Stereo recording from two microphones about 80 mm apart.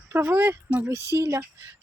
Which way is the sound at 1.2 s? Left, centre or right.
Right.